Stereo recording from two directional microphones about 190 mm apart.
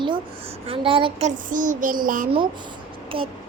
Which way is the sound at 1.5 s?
45° right (ahead or behind).